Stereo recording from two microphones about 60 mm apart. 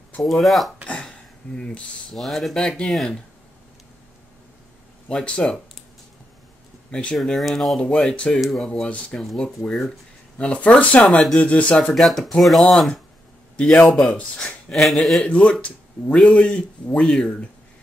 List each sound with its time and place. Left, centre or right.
0.2 s speech: centre
2.1 s speech: centre
5.0 s speech: centre
6.9 s speech: centre
7.3 s speech: centre
7.8 s speech: centre
10.3 s speech: centre
11.8 s speech: centre
13.6 s speech: centre
14.7 s speech: centre
15.2 s speech: centre